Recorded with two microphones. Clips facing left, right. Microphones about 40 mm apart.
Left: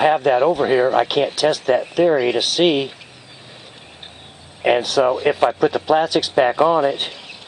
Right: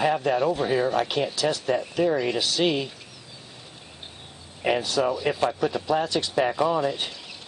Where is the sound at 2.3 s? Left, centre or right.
Left.